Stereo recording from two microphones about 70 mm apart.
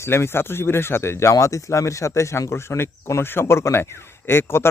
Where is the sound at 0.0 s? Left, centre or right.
Left.